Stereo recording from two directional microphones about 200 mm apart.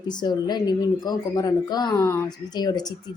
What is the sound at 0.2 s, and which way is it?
Speech, 20° left (ahead or behind).